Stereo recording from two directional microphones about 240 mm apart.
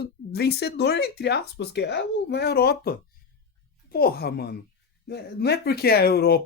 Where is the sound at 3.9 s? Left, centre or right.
Left.